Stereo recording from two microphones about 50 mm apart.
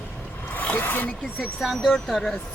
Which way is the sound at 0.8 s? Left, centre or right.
Left.